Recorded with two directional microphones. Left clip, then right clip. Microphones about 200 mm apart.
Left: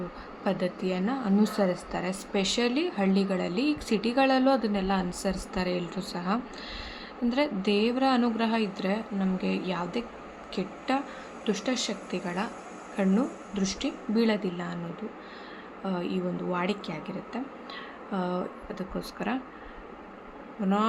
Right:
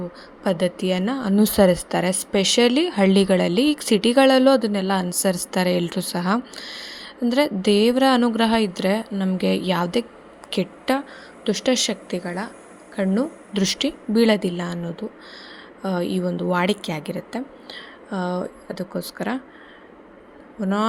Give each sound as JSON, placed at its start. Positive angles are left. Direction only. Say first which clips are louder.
{"t": 0.4, "sound": "a woman's voice", "louder": "right 8 dB", "side_deg": -35}
{"t": 15.8, "sound": "speech", "louder": "right 8 dB", "side_deg": -35}